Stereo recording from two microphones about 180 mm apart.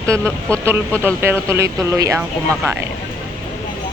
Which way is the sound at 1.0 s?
15° right (ahead or behind).